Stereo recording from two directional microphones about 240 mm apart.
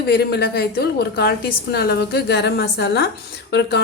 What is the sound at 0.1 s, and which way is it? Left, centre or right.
A woman's voice, left.